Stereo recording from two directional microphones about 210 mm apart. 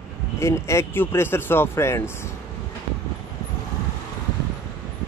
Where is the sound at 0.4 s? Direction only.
15° left (ahead or behind).